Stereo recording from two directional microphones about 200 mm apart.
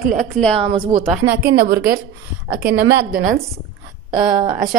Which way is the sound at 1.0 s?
Centre (ahead or behind).